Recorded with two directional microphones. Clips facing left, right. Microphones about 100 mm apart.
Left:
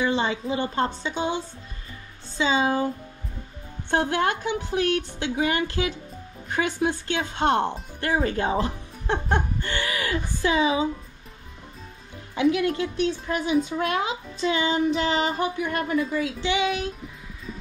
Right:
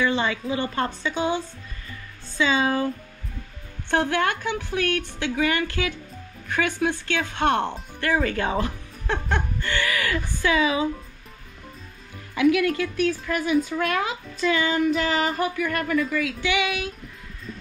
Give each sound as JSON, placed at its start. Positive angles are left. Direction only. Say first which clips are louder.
{"t": 0.0, "sound": "speech", "louder": "right 1 dB", "side_deg": 20}
{"t": 3.9, "sound": "speech", "louder": "even", "side_deg": 20}
{"t": 12.4, "sound": "speech", "louder": "right 2 dB", "side_deg": 25}